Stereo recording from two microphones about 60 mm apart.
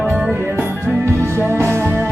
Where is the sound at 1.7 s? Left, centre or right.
Right.